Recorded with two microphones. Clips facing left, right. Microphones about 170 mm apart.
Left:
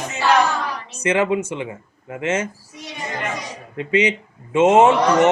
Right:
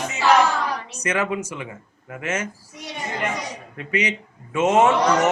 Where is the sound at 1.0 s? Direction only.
25° left (ahead or behind).